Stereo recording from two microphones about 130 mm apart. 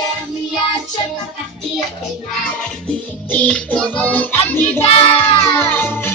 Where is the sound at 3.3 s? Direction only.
10° left (ahead or behind).